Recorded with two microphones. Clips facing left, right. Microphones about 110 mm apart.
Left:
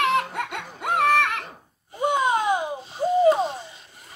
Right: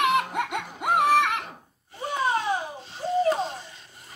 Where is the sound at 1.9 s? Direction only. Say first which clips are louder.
Left 4 dB; 20° left (ahead or behind).